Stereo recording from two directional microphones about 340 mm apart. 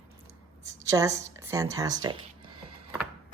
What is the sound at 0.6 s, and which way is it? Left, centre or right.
Speech, centre.